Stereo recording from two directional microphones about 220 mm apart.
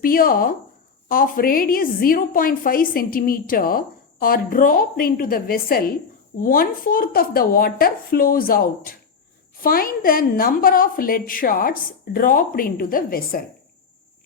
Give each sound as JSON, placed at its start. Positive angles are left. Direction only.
{"t": 0.0, "sound": "a woman's voice", "side_deg": 40}